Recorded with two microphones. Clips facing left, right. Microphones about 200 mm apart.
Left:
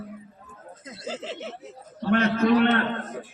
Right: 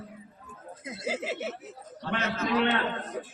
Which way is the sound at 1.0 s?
10° right (ahead or behind).